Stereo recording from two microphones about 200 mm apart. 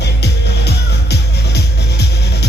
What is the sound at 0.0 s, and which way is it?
Music, 55° left (ahead or behind).